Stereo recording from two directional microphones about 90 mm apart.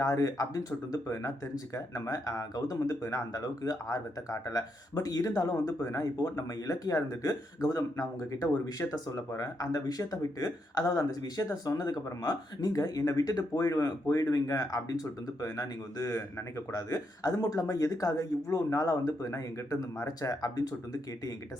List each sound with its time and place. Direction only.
0.0 s speech: 40° left (ahead or behind)